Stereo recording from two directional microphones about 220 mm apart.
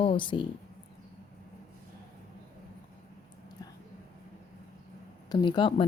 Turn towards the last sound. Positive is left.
turn(degrees=20)  # may be behind; listen again after turning